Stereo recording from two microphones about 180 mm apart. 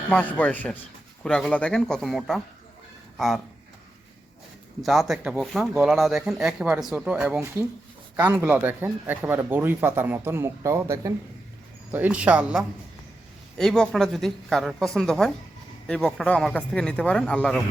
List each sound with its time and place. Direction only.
0.1 s a man's voice: 10° left (ahead or behind)
4.8 s a man's voice: centre (ahead or behind)